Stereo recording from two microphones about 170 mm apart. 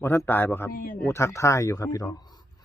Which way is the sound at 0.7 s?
60° left (ahead or behind).